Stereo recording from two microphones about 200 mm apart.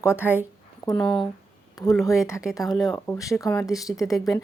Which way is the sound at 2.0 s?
15° left (ahead or behind).